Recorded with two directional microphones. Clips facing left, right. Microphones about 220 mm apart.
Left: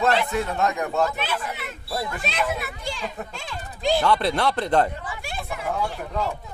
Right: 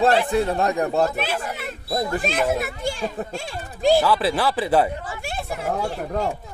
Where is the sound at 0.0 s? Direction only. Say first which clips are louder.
Right 4 dB; 30° right (ahead or behind).